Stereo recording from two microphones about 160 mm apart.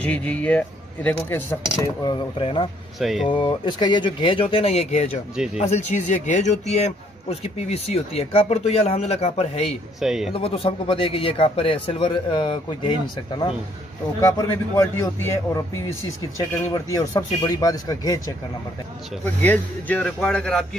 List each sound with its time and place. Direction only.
0.0 s speech: 5° left (ahead or behind)
2.0 s a man's voice: 30° left (ahead or behind)
3.0 s a man's voice: centre (ahead or behind)
3.3 s a man's voice: 30° left (ahead or behind)
5.3 s a man's voice: 5° right (ahead or behind)
5.6 s a man's voice: 45° left (ahead or behind)
9.9 s a man's voice: centre (ahead or behind)
10.3 s a man's voice: 35° left (ahead or behind)
14.8 s speech: 15° left (ahead or behind)
19.4 s a man's voice: 10° left (ahead or behind)